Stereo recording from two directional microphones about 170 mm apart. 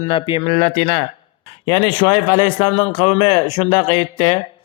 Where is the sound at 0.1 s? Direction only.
30° left (ahead or behind).